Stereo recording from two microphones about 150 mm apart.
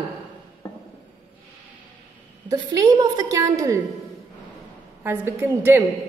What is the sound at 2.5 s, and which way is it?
A woman's voice, 25° right (ahead or behind).